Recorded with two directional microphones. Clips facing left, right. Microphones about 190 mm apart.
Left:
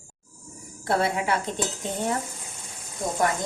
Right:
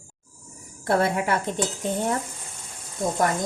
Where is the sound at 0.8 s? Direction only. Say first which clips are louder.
Right 2 dB; 50° right (ahead or behind).